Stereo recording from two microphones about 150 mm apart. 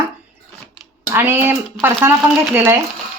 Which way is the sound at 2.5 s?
15° right (ahead or behind).